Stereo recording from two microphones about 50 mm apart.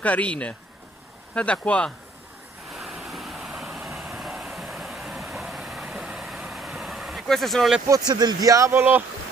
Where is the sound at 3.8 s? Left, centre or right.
Centre.